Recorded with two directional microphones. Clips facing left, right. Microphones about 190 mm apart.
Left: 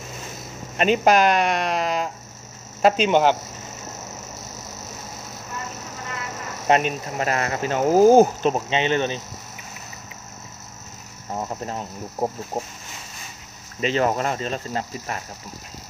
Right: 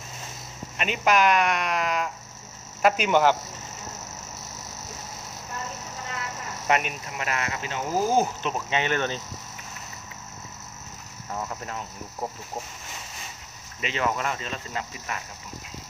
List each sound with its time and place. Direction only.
0.7 s speech: 35° left (ahead or behind)
6.7 s speech: 30° left (ahead or behind)
8.6 s speech: 20° left (ahead or behind)
11.3 s speech: 30° left (ahead or behind)
13.7 s speech: 35° left (ahead or behind)